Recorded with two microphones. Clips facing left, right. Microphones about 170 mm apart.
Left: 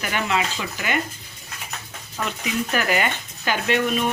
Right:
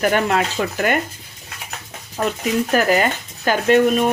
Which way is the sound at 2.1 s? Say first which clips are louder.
Right 6 dB; 40° right (ahead or behind).